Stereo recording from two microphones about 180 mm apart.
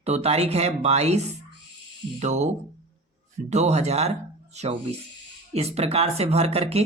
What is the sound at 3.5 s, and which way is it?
Speech, 40° right (ahead or behind).